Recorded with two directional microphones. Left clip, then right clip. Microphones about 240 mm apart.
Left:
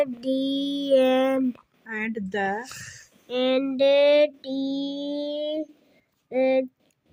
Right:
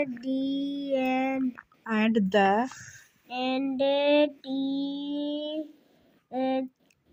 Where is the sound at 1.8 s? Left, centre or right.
Centre.